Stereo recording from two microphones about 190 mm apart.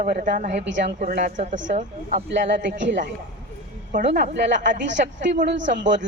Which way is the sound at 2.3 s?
70° right (ahead or behind).